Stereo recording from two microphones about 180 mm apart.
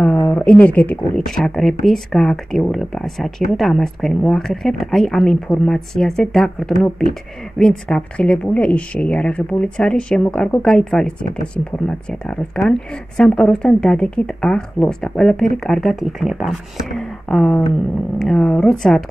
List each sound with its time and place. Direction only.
0.3 s speech: 10° left (ahead or behind)